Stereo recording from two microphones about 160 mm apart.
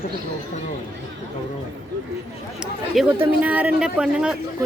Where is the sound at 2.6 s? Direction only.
5° right (ahead or behind).